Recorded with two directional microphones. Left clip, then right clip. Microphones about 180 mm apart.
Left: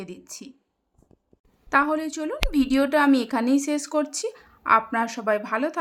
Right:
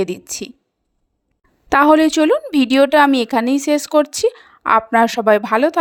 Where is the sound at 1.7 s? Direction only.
50° right (ahead or behind).